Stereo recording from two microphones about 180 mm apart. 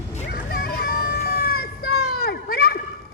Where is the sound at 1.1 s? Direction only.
60° left (ahead or behind).